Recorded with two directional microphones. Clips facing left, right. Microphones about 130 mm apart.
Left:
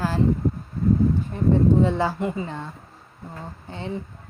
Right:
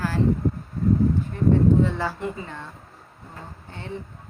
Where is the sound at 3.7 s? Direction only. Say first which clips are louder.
Left 6 dB; 20° left (ahead or behind).